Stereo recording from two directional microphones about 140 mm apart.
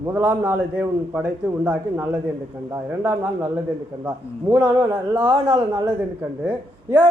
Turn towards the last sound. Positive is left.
turn(degrees=-15)  # may be behind; listen again after turning